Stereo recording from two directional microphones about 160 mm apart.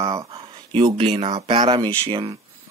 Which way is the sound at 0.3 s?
35° right (ahead or behind).